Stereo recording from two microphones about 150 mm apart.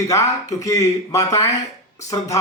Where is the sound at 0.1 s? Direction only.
20° left (ahead or behind).